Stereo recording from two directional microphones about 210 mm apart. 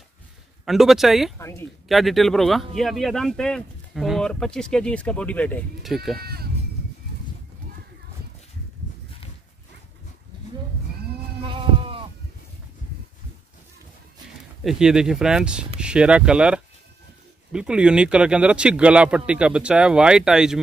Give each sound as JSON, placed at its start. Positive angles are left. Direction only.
{"t": 0.7, "sound": "speech", "side_deg": 0}
{"t": 1.4, "sound": "speech", "side_deg": 15}
{"t": 1.9, "sound": "speech", "side_deg": 0}
{"t": 6.1, "sound": "speech", "side_deg": -45}
{"t": 11.4, "sound": "sheep", "side_deg": -25}
{"t": 14.6, "sound": "speech", "side_deg": 0}